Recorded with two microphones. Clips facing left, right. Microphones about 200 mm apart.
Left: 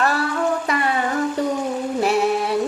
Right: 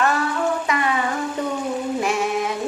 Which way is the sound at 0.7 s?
35° left (ahead or behind).